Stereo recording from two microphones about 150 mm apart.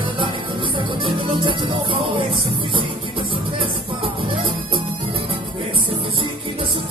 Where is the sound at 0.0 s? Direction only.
35° right (ahead or behind).